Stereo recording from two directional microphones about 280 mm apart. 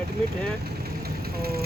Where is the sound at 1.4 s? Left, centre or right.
Right.